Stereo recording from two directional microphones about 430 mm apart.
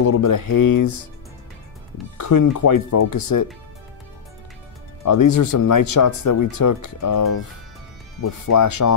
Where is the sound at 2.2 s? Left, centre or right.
Left.